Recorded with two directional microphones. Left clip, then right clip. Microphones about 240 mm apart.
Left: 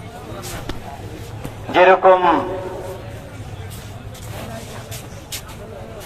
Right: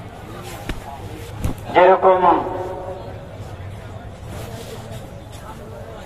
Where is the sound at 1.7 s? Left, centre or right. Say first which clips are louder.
Left 1 dB; left.